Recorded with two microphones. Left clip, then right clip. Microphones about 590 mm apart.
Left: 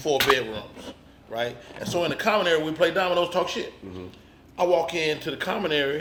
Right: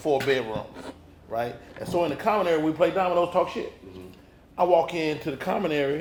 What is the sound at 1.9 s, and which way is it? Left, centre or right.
A man's voice, right.